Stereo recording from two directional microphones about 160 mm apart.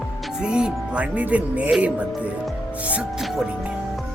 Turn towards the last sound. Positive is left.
turn(degrees=-5)  # may be behind; listen again after turning